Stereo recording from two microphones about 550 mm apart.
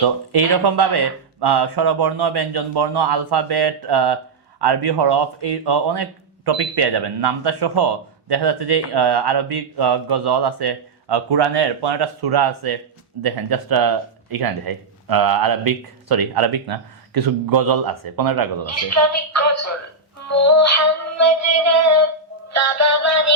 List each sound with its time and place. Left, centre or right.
0.3 s speech: right
18.6 s music: left